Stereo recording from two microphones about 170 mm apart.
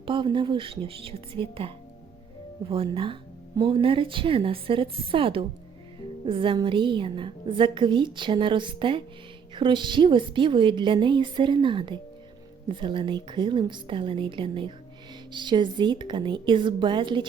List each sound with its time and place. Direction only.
0.0 s a woman's voice: 30° right (ahead or behind)